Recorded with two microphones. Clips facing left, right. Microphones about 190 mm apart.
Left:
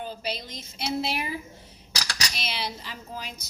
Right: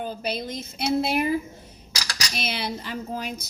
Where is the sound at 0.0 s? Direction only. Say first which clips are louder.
Right 4 dB; 50° right (ahead or behind).